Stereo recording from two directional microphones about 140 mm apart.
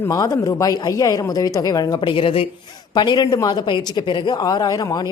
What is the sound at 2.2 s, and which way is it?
A woman's voice, 40° left (ahead or behind).